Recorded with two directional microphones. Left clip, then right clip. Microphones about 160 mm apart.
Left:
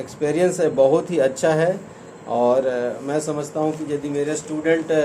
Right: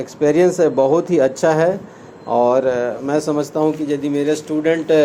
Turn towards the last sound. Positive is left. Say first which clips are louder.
# right 4 dB
turn(degrees=-60)  # may be behind; listen again after turning